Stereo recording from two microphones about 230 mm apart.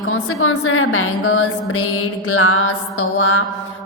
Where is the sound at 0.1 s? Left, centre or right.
Left.